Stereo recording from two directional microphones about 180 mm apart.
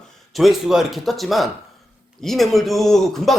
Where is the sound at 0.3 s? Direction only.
Centre (ahead or behind).